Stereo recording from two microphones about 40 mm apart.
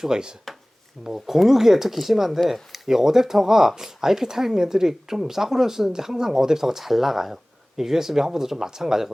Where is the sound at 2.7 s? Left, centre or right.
Centre.